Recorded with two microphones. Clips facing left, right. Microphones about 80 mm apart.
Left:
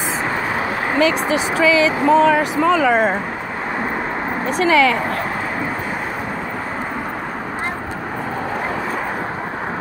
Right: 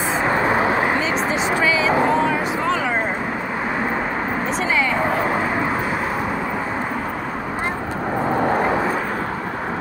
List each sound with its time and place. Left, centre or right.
0.9 s speech: left
4.6 s speech: left